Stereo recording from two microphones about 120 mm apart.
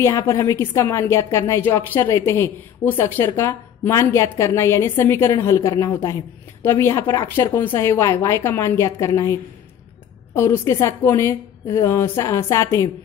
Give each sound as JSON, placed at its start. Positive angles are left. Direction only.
{"t": 0.0, "sound": "a woman's voice", "side_deg": 25}